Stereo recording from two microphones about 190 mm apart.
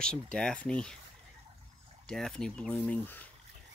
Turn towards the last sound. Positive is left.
turn(degrees=10)  # may be behind; listen again after turning